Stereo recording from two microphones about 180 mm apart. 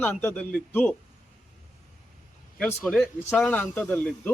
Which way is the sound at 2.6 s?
5° left (ahead or behind).